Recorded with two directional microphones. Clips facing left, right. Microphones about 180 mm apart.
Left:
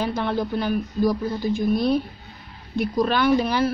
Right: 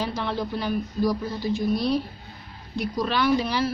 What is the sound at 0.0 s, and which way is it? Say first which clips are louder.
A woman's voice: left 4 dB; 50° left (ahead or behind).